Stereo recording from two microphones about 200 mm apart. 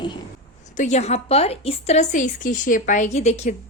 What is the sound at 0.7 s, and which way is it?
A woman's voice, 35° left (ahead or behind).